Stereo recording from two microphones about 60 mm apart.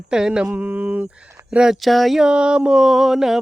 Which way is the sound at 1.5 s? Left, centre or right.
Centre.